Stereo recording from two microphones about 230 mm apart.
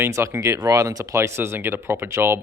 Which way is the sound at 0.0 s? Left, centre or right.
Centre.